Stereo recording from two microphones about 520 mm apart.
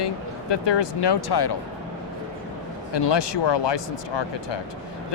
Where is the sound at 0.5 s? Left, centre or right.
Left.